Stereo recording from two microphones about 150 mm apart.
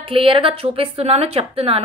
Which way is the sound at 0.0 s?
35° right (ahead or behind).